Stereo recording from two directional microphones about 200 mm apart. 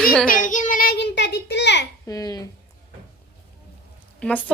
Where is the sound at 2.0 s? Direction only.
20° left (ahead or behind).